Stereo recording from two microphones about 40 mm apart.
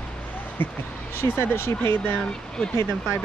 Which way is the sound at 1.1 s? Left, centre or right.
Left.